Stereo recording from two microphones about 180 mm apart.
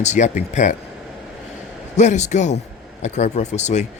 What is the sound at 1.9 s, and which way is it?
Speech, 40° left (ahead or behind).